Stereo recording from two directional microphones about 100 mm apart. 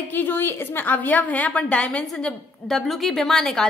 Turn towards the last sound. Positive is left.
turn(degrees=5)  # may be behind; listen again after turning